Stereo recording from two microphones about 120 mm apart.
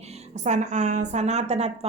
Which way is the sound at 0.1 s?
80° right.